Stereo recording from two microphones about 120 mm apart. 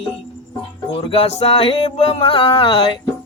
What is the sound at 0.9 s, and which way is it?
Music, 55° left (ahead or behind).